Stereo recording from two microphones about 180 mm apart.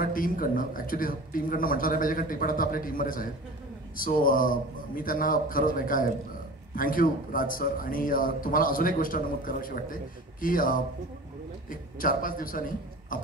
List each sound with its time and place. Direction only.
0.0 s a man's voice: 50° left (ahead or behind)